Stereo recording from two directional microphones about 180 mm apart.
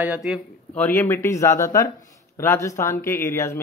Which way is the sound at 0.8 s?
10° left (ahead or behind).